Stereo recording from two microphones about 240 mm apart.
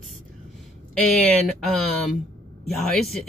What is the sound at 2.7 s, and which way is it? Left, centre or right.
Speech, centre.